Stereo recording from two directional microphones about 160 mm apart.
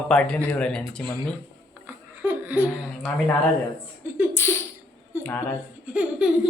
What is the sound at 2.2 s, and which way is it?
Laughter, 10° right (ahead or behind).